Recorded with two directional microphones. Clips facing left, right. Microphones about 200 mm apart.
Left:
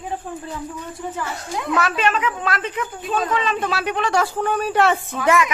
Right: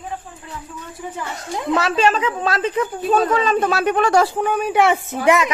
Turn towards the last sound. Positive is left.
turn(degrees=-20)  # may be behind; listen again after turning